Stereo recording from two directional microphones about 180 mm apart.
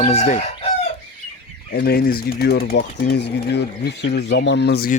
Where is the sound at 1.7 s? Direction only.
60° left (ahead or behind).